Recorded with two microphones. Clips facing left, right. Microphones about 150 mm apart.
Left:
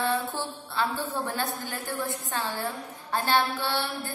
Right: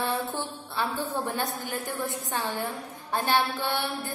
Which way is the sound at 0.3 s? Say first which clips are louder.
Even; 15° right (ahead or behind).